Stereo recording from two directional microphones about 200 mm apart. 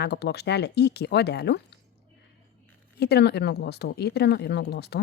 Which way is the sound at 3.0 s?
55° left (ahead or behind).